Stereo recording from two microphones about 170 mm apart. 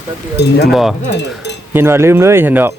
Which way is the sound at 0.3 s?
80° left.